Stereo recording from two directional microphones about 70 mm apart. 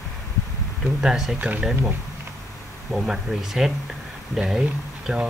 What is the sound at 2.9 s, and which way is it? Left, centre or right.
Speech, centre.